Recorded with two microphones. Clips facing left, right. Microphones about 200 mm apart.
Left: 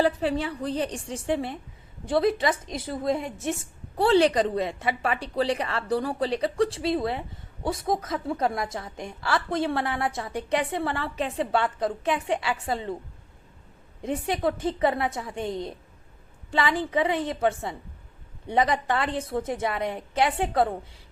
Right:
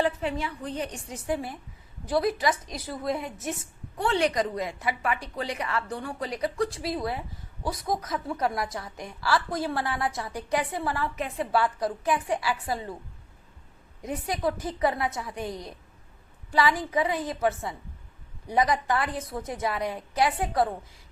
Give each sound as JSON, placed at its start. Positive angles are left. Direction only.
{"t": 0.0, "sound": "a woman's voice", "side_deg": 35}
{"t": 14.0, "sound": "a woman's voice", "side_deg": 25}